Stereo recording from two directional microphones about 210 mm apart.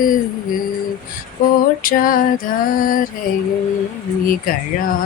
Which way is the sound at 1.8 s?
40° left (ahead or behind).